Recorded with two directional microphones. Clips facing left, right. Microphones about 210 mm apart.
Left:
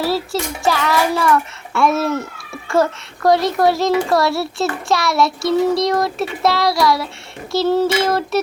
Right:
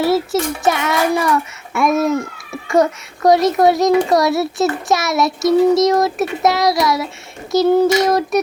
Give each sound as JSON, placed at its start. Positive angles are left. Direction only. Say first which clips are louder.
{"t": 0.0, "sound": "a child's voice", "louder": "right 4 dB", "side_deg": -20}